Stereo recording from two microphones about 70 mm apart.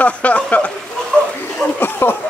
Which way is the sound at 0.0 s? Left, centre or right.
Left.